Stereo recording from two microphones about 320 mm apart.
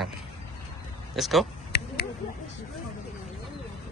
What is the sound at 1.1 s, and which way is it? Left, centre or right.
Speech, centre.